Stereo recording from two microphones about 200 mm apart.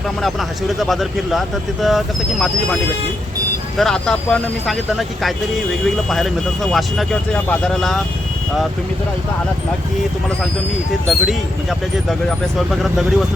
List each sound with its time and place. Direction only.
0.2 s speech: centre (ahead or behind)
3.8 s speech: 5° left (ahead or behind)
11.1 s speech: centre (ahead or behind)